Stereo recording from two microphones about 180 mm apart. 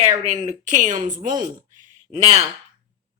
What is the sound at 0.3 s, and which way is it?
Speech, 40° right (ahead or behind).